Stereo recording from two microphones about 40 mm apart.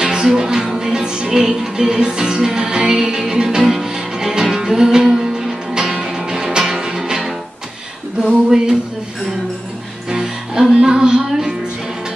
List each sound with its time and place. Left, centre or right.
0.0 s music: centre
8.5 s a sound: centre
10.0 s music: centre